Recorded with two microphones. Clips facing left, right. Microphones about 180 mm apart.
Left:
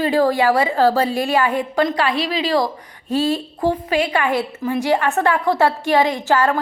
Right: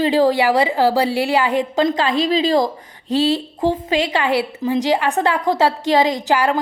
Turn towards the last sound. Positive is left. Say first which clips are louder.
# even
turn(degrees=-15)  # may be behind; listen again after turning